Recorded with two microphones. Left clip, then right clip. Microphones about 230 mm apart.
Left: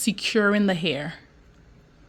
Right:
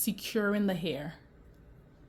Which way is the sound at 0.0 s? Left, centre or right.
Left.